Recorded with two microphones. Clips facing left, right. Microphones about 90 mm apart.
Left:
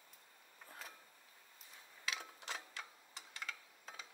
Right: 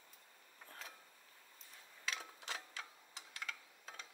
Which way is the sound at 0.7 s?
5° left (ahead or behind).